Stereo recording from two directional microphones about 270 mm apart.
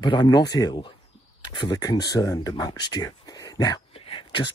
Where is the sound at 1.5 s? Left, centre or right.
Centre.